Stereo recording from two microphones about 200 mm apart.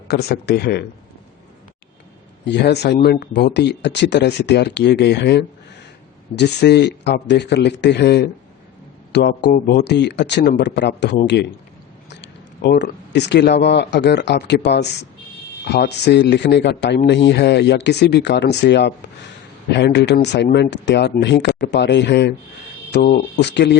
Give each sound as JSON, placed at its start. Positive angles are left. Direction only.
{"t": 0.1, "sound": "speech", "side_deg": 55}
{"t": 2.4, "sound": "speech", "side_deg": 60}